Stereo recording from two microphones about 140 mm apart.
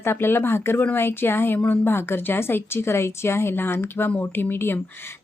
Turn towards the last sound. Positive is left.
turn(degrees=15)  # may be behind; listen again after turning